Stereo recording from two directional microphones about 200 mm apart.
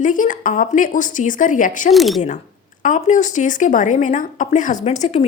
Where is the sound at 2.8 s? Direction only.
40° left (ahead or behind).